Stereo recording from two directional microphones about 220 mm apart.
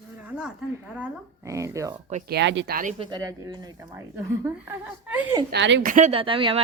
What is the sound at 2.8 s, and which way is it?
Speech, 35° right (ahead or behind).